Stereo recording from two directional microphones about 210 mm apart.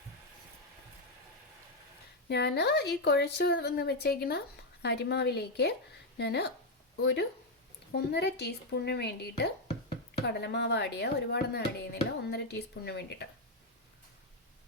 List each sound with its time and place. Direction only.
2.3 s speech: 50° left (ahead or behind)